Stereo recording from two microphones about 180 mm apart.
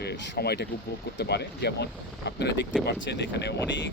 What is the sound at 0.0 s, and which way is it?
Speech, 65° left (ahead or behind).